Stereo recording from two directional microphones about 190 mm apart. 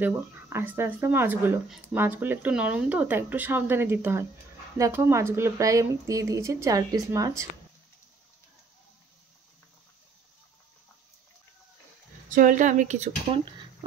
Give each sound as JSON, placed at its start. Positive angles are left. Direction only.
{"t": 0.0, "sound": "speech", "side_deg": -10}
{"t": 12.3, "sound": "speech", "side_deg": -45}